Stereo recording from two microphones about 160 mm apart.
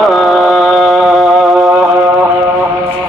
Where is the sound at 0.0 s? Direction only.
Centre (ahead or behind).